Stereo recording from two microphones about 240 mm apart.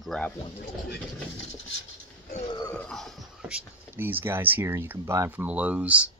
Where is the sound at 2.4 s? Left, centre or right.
Centre.